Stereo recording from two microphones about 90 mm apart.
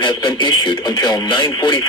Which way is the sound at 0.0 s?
55° left (ahead or behind).